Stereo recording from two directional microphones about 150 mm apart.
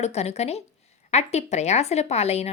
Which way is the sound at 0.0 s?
45° left (ahead or behind).